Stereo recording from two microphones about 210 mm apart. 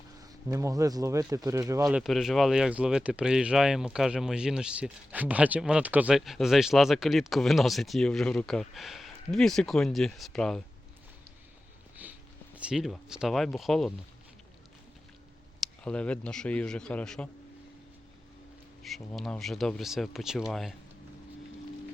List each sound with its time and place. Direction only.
0.4 s speech: 15° right (ahead or behind)
1.9 s speech: centre (ahead or behind)
12.0 s a sound: 10° right (ahead or behind)
12.5 s speech: 5° right (ahead or behind)
15.6 s speech: 5° left (ahead or behind)
18.8 s speech: centre (ahead or behind)